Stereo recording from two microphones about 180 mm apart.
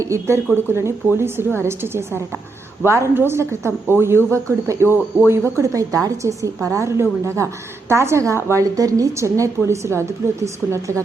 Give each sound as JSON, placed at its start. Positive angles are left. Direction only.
{"t": 0.0, "sound": "a woman's voice", "side_deg": -15}